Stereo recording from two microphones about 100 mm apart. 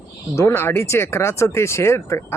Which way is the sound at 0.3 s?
25° left (ahead or behind).